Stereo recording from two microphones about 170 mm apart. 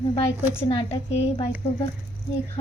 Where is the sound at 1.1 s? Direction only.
35° left (ahead or behind).